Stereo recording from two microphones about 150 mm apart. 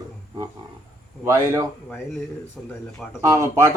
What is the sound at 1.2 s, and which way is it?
Speech, 20° right (ahead or behind).